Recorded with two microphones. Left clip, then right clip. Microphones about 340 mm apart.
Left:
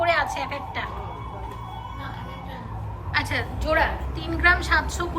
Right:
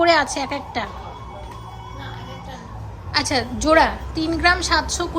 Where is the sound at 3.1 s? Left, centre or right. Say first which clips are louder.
Right 5 dB; centre.